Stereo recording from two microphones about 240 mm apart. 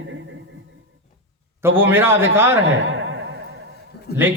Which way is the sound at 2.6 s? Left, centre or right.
Right.